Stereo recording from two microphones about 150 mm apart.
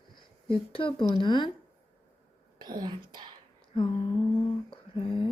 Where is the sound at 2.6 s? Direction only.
30° right (ahead or behind).